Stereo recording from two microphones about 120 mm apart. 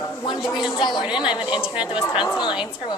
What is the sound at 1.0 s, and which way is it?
A woman's voice, 40° left (ahead or behind).